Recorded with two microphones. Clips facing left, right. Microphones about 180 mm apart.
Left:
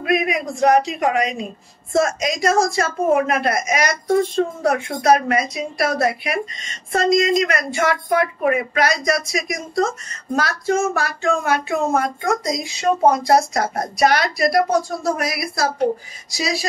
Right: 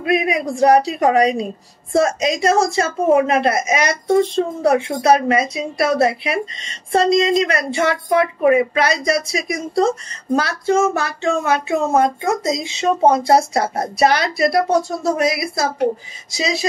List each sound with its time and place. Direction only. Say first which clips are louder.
0.0 s speech: right 2 dB; 30° right (ahead or behind)